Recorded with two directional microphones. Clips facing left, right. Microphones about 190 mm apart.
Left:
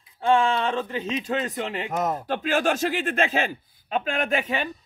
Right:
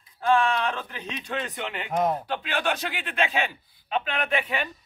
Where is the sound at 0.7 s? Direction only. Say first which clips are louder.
Left 8 dB; 30° left (ahead or behind).